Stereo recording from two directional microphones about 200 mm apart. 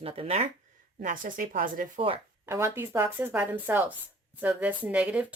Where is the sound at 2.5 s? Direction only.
10° right (ahead or behind).